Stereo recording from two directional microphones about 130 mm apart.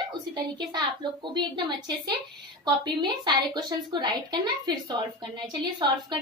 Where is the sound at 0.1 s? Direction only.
35° right (ahead or behind).